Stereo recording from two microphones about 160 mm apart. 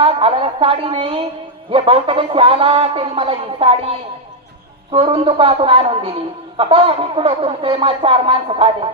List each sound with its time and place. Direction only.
0.0 s speech: 35° right (ahead or behind)